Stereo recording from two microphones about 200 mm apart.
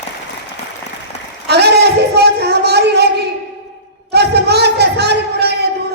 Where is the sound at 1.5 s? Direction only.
55° right (ahead or behind).